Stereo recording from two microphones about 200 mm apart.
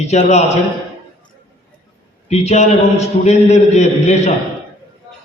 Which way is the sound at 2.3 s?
35° left (ahead or behind).